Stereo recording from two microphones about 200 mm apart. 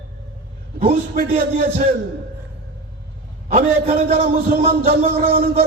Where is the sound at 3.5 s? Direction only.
30° right (ahead or behind).